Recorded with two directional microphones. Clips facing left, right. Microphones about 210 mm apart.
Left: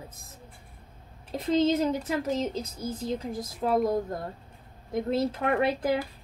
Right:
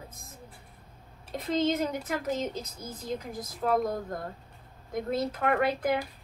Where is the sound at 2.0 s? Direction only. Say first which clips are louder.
Left 3 dB; 30° left (ahead or behind).